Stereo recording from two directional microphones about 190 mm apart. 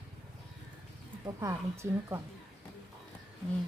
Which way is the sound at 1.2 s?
15° right (ahead or behind).